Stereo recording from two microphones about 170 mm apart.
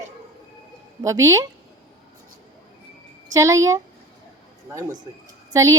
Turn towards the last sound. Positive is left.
turn(degrees=-20)  # may be behind; listen again after turning